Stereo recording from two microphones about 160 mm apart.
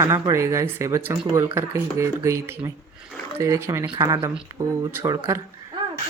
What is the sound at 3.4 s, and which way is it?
Speech, 20° right (ahead or behind).